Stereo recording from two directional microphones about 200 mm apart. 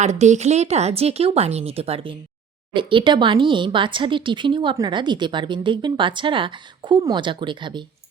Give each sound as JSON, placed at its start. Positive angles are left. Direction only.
{"t": 0.0, "sound": "speech", "side_deg": -35}